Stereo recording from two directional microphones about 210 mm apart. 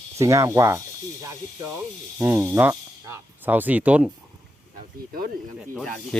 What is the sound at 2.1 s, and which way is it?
Speech, 10° right (ahead or behind).